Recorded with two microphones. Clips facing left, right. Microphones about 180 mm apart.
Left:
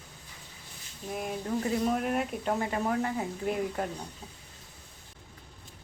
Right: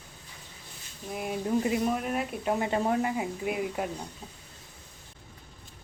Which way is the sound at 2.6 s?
25° right (ahead or behind).